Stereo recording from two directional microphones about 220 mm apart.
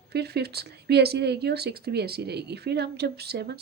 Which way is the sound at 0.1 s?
45° right (ahead or behind).